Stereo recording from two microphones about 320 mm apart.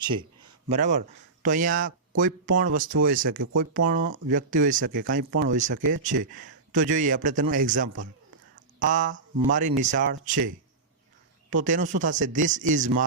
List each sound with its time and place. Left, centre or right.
0.0 s speech: centre
11.5 s speech: right